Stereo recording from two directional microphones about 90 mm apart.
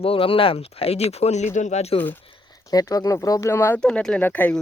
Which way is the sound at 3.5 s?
25° left (ahead or behind).